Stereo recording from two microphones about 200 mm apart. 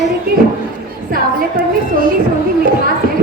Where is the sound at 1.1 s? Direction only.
45° right (ahead or behind).